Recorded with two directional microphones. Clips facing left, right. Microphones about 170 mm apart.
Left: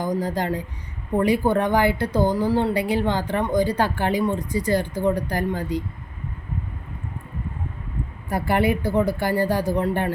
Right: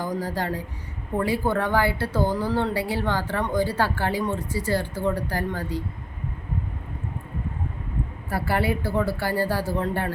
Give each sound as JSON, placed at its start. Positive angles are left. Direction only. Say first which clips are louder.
{"t": 0.0, "sound": "speech", "louder": "left 3 dB", "side_deg": 20}
{"t": 8.3, "sound": "speech", "louder": "left 4 dB", "side_deg": 20}